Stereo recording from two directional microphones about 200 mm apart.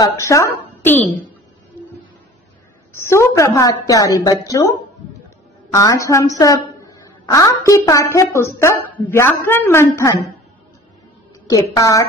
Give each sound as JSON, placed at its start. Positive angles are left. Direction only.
{"t": 0.0, "sound": "a woman's voice", "side_deg": 15}
{"t": 0.8, "sound": "a sound", "side_deg": 10}
{"t": 3.1, "sound": "a woman's voice", "side_deg": 15}
{"t": 11.4, "sound": "a woman's voice", "side_deg": 20}